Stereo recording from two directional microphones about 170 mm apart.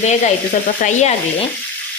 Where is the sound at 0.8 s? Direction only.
45° left (ahead or behind).